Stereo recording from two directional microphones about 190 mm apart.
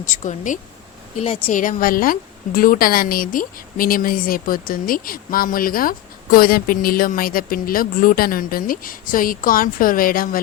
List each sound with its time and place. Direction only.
0.0 s speech: 40° left (ahead or behind)
1.2 s speech: 30° left (ahead or behind)
1.5 s a woman's voice: 45° left (ahead or behind)